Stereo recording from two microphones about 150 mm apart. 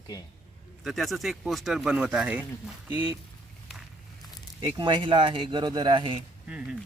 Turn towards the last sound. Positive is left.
turn(degrees=-5)  # may be behind; listen again after turning